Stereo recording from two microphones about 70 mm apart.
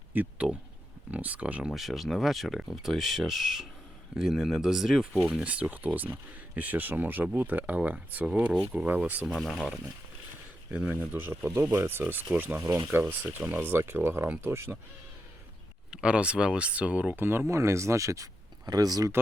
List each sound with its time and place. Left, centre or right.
0.1 s speech: right
1.7 s speech: centre
5.4 s speech: centre
9.2 s speech: centre
11.1 s speech: right
15.9 s speech: centre
17.2 s speech: right
17.5 s speech: right